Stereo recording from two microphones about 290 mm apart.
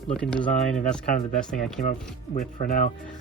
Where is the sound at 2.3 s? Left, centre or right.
Left.